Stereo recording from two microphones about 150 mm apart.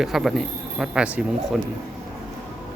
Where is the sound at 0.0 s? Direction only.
Centre (ahead or behind).